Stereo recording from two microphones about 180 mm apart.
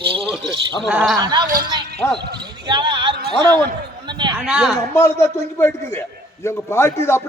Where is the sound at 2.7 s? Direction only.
25° right (ahead or behind).